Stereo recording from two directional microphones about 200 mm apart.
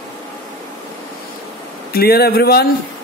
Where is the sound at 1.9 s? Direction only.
50° left (ahead or behind).